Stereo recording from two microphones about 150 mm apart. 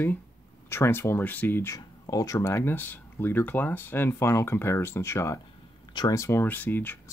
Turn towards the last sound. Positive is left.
turn(degrees=10)  # may be behind; listen again after turning